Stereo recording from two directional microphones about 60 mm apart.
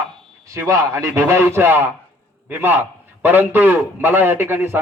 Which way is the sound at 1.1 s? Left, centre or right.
Right.